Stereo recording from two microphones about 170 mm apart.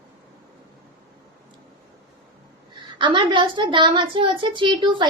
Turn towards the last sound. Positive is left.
turn(degrees=-30)  # may be behind; listen again after turning